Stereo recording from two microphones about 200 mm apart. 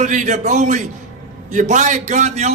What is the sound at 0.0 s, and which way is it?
A man's voice, 35° right (ahead or behind).